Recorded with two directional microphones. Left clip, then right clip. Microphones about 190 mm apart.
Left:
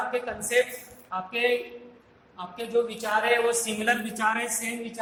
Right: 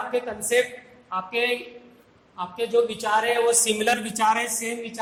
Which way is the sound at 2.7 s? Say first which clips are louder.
Right 4 dB; 35° right (ahead or behind).